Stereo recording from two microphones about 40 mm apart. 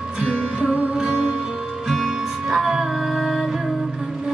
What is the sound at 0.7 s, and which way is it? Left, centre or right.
Music, right.